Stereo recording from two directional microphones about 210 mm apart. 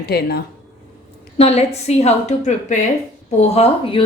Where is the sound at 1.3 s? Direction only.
30° left (ahead or behind).